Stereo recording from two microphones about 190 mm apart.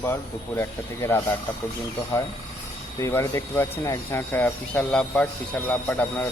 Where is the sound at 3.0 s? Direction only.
15° left (ahead or behind).